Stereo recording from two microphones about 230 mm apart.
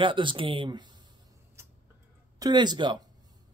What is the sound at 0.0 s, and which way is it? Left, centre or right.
Speech, right.